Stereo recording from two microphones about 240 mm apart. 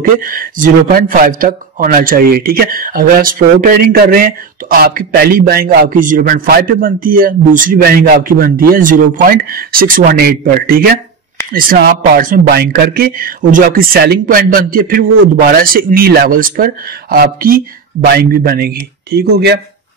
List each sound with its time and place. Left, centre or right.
0.2 s a man's voice: right